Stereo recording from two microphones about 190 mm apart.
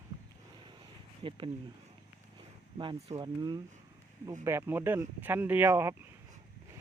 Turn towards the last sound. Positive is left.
turn(degrees=-15)  # may be behind; listen again after turning